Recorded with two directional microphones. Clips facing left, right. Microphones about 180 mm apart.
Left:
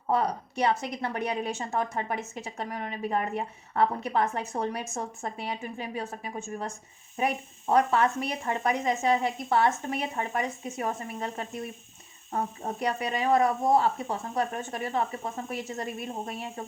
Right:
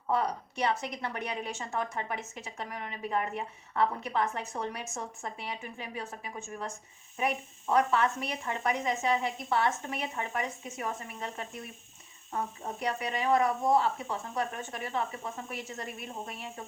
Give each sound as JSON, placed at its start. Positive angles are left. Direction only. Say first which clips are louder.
{"t": 0.1, "sound": "a woman's voice", "louder": "left 3 dB", "side_deg": 40}